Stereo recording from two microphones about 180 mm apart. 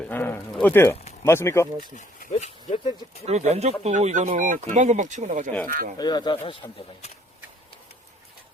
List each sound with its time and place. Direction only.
0.0 s speech: 10° left (ahead or behind)
2.0 s speech: 40° left (ahead or behind)
3.2 s speech: 35° right (ahead or behind)
6.0 s speech: 25° left (ahead or behind)